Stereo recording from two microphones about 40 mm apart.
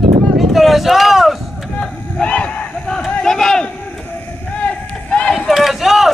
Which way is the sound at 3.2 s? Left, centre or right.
Centre.